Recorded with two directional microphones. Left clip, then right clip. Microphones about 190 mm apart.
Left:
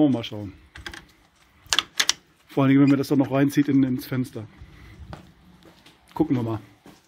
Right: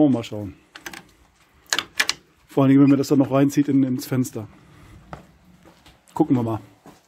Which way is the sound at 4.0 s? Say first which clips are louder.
Right 4 dB; 20° right (ahead or behind).